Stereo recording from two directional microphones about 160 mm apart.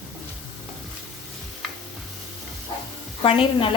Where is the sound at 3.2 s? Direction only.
35° left (ahead or behind).